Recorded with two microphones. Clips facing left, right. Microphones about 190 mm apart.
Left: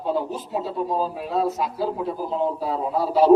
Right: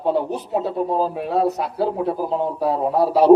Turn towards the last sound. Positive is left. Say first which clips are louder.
# right 3 dB
turn(degrees=-65)  # may be behind; listen again after turning